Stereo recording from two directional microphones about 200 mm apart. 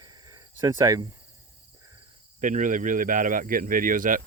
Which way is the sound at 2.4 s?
40° right (ahead or behind).